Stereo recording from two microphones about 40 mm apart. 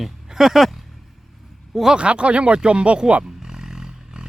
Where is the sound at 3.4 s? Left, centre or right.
Centre.